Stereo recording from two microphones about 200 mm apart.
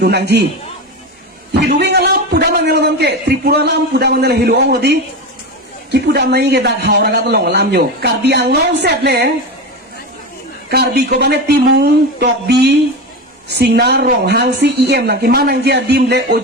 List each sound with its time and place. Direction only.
0.0 s a man's voice: 55° right (ahead or behind)
1.5 s a man's voice: 55° right (ahead or behind)
10.7 s a man's voice: 50° right (ahead or behind)